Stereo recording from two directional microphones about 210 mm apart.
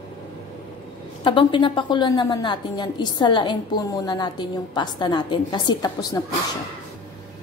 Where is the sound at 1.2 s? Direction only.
25° left (ahead or behind).